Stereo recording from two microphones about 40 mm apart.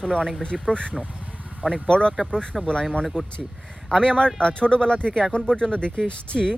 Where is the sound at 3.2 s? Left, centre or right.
Right.